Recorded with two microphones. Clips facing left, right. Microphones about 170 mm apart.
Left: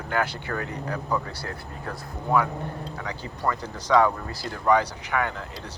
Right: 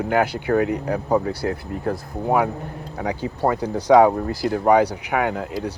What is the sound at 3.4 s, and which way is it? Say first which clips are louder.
Speech: right 7 dB; 60° right (ahead or behind).